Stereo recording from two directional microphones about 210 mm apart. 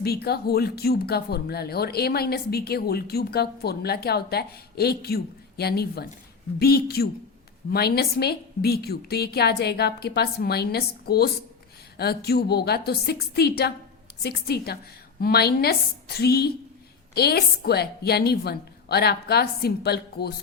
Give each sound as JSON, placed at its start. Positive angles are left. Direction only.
{"t": 0.0, "sound": "speech", "side_deg": 50}